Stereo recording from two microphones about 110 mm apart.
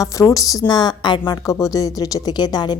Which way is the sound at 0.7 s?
40° left (ahead or behind).